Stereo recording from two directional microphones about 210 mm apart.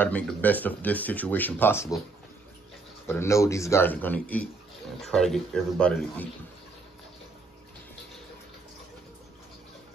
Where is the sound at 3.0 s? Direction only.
10° left (ahead or behind).